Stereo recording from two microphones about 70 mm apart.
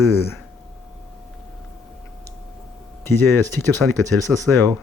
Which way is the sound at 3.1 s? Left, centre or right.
Left.